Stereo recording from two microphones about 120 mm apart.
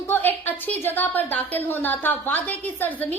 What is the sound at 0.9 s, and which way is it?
A woman's voice, 15° left (ahead or behind).